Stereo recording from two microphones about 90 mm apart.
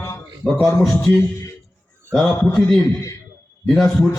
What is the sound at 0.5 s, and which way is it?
Music, 30° left (ahead or behind).